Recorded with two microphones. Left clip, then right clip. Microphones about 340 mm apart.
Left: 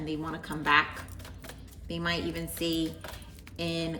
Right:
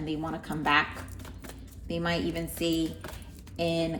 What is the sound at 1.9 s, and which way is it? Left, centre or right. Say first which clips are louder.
A woman's voice: right 2 dB; centre.